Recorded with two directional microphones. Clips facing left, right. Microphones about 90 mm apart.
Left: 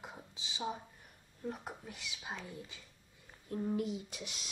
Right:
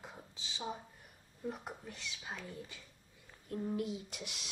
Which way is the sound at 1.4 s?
Centre (ahead or behind).